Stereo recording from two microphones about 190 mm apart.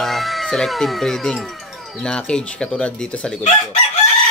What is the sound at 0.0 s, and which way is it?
Speech, centre (ahead or behind).